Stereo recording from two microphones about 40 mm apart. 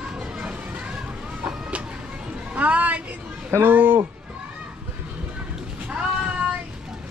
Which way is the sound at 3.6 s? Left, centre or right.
Right.